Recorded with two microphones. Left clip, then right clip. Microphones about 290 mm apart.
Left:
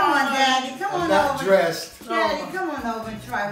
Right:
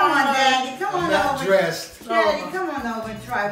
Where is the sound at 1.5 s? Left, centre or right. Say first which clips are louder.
Left 1 dB; centre.